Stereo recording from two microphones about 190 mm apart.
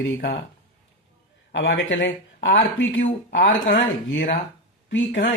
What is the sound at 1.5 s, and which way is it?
A man's voice, 75° left (ahead or behind).